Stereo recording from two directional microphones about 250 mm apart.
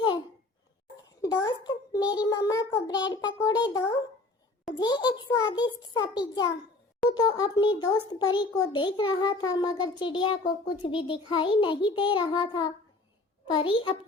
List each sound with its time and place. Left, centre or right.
1.2 s a child's voice: centre
10.9 s child singing: left